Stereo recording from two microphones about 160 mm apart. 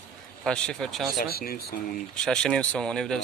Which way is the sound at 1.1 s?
75° left (ahead or behind).